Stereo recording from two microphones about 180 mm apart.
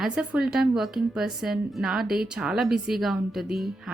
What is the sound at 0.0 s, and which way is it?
A woman's voice, 5° right (ahead or behind).